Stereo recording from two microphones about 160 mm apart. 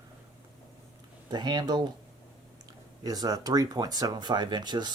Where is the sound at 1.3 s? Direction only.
25° right (ahead or behind).